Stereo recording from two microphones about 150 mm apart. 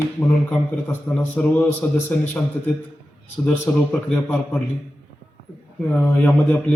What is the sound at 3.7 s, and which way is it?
Speech, 10° left (ahead or behind).